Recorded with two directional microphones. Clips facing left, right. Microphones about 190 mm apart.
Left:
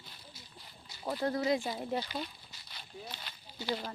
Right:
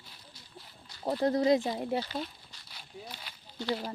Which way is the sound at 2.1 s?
Centre (ahead or behind).